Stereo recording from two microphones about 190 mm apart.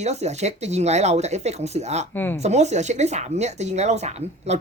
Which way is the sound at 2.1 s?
10° left (ahead or behind).